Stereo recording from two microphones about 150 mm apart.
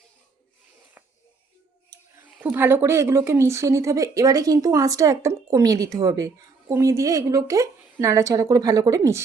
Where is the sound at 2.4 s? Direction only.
10° right (ahead or behind).